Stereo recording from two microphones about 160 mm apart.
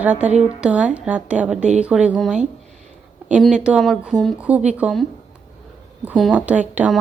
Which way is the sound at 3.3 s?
5° right (ahead or behind).